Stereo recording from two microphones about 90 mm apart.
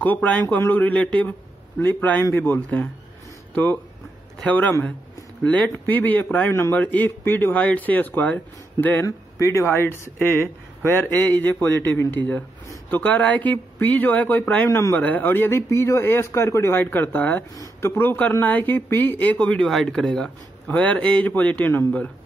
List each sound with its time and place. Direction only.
0.0 s speech: 15° left (ahead or behind)
6.5 s speech: 30° left (ahead or behind)
6.8 s speech: 20° left (ahead or behind)
9.0 s speech: 35° left (ahead or behind)
17.6 s speech: 30° left (ahead or behind)